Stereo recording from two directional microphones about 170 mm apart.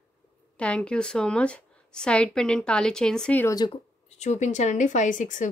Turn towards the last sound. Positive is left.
turn(degrees=50)  # may be behind; listen again after turning